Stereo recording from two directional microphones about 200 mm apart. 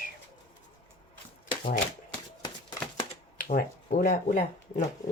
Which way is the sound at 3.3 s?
40° left (ahead or behind).